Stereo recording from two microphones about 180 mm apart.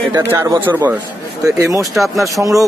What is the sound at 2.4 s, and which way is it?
Speech, 20° right (ahead or behind).